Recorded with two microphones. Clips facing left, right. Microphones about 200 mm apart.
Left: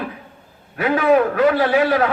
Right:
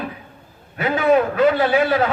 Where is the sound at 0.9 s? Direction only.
25° right (ahead or behind).